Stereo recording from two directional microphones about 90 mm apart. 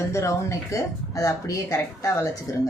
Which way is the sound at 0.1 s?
35° left (ahead or behind).